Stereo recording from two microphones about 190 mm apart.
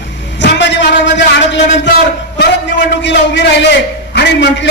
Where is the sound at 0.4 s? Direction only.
65° left (ahead or behind).